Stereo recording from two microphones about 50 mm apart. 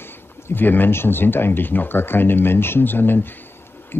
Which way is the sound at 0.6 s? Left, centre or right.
Left.